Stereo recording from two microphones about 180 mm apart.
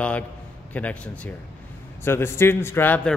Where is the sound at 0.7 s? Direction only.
10° left (ahead or behind).